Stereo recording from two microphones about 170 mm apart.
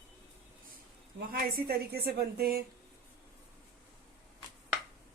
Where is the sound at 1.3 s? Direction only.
60° right (ahead or behind).